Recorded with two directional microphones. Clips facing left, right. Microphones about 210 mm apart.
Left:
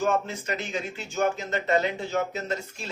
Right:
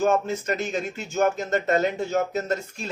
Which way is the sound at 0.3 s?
45° right (ahead or behind).